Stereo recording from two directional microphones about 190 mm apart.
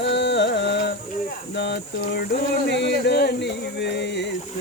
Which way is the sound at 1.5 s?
60° left (ahead or behind).